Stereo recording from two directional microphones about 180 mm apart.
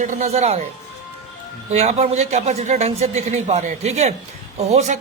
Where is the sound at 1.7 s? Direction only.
35° right (ahead or behind).